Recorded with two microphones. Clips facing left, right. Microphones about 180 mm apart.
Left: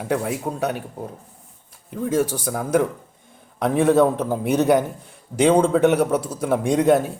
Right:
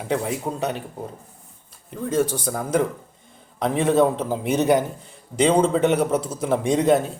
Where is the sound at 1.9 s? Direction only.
15° left (ahead or behind).